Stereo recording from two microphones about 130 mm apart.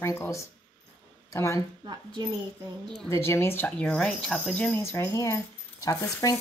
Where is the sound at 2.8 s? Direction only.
5° left (ahead or behind).